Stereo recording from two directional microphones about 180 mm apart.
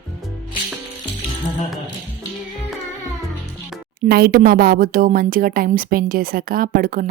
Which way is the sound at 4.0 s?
60° right (ahead or behind).